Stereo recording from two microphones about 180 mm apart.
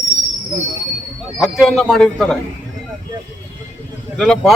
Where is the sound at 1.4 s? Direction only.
Centre (ahead or behind).